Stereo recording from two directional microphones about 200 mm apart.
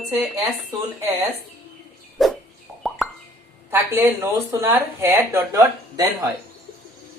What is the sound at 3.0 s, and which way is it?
Plop, centre (ahead or behind).